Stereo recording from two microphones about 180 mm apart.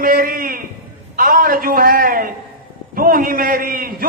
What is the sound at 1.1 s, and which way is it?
A man's voice, 55° right (ahead or behind).